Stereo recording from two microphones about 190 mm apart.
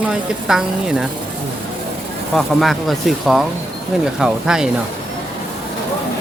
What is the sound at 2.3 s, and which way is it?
Speech, centre (ahead or behind).